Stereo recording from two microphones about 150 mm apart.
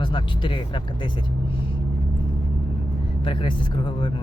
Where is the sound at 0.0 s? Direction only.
30° left (ahead or behind).